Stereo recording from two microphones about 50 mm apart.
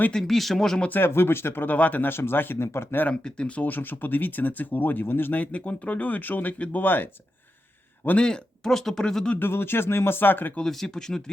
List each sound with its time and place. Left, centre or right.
0.1 s speech: centre
0.9 s speech: left
1.6 s speech: left
2.0 s speech: left
3.1 s speech: left
8.2 s speech: centre
9.4 s speech: left
10.7 s speech: centre